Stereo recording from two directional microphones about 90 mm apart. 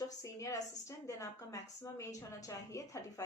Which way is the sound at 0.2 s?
35° left (ahead or behind).